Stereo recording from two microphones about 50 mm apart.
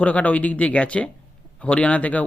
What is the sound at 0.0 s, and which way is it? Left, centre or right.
Speech, left.